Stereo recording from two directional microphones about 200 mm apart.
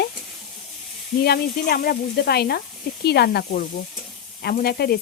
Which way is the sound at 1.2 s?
50° left (ahead or behind).